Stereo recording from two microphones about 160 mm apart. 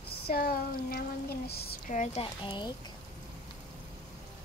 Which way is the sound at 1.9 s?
45° left (ahead or behind).